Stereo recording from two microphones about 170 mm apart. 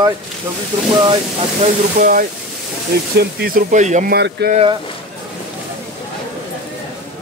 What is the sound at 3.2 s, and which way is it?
Speech, 65° right (ahead or behind).